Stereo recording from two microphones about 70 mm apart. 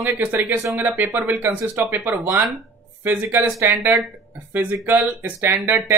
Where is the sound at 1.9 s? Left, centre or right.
Right.